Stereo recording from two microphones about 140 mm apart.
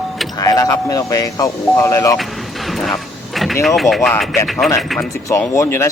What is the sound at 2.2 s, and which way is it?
Vehicle, centre (ahead or behind).